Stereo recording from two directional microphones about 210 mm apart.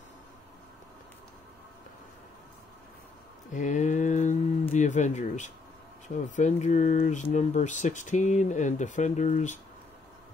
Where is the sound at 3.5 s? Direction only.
35° left (ahead or behind).